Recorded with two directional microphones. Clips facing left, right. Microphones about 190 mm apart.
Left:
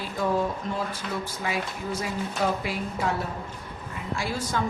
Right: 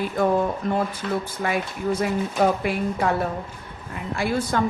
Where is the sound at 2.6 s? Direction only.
55° right (ahead or behind).